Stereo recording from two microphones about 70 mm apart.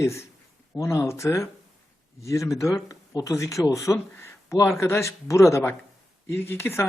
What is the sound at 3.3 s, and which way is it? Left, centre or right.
Speech, left.